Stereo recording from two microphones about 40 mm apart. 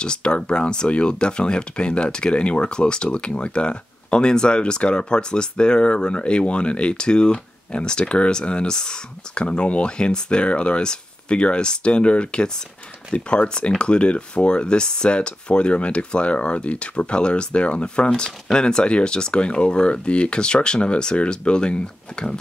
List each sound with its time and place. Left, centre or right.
0.0 s speech: left